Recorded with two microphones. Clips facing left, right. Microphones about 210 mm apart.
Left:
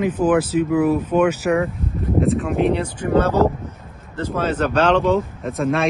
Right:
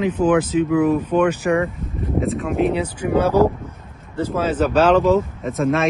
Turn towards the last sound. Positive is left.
turn(degrees=0)  # may be behind; listen again after turning